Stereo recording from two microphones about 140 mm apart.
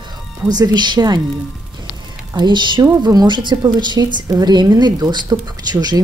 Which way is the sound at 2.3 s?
35° right (ahead or behind).